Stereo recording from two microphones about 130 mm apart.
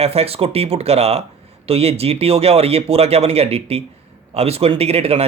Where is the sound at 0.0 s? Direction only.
50° right (ahead or behind).